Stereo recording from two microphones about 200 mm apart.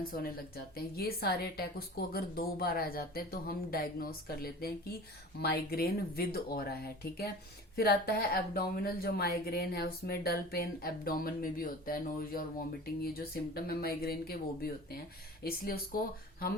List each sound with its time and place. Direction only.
0.0 s speech: 50° left (ahead or behind)